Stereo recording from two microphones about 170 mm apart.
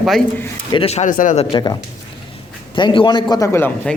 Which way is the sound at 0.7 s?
35° left (ahead or behind).